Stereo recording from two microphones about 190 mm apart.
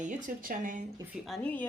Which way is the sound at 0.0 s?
45° right (ahead or behind).